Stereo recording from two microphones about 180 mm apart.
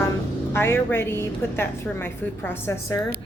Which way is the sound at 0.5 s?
15° left (ahead or behind).